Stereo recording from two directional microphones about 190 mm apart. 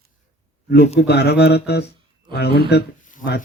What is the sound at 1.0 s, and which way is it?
Speech, 60° left (ahead or behind).